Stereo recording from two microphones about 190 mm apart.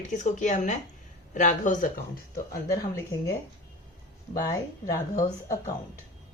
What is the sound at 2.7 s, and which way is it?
Speech, 15° left (ahead or behind).